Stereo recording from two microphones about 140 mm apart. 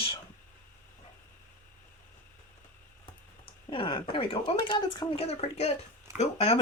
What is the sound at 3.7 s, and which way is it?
Speech, 40° left (ahead or behind).